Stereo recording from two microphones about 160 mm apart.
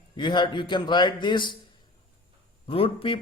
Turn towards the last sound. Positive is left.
turn(degrees=35)  # may be behind; listen again after turning